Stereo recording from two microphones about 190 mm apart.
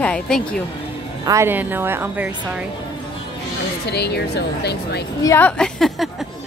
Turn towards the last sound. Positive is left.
turn(degrees=0)  # may be behind; listen again after turning